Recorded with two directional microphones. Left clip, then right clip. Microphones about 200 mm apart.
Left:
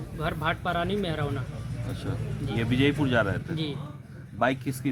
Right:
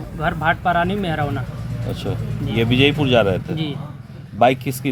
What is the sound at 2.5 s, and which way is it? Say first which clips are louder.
Speech: right 9 dB; 70° right (ahead or behind).